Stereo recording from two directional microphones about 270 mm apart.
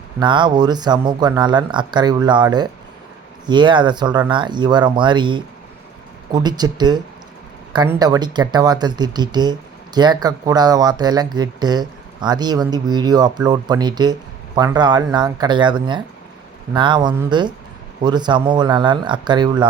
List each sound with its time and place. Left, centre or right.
0.2 s speech: centre